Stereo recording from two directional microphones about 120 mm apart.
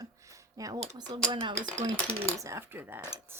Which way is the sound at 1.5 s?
10° left (ahead or behind).